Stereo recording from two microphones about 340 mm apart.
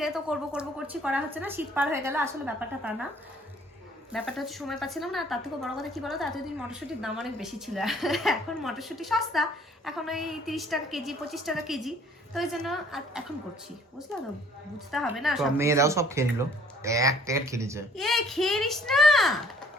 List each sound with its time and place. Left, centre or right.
0.0 s a woman's voice: centre
4.1 s a woman's voice: centre
14.9 s a woman's voice: centre